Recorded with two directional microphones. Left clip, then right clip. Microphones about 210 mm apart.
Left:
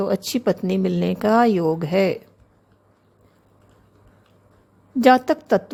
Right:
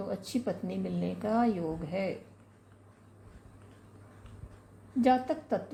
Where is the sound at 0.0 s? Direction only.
50° left (ahead or behind).